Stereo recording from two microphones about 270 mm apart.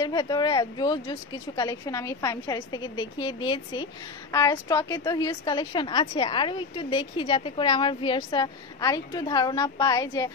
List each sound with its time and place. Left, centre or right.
0.0 s a woman's voice: centre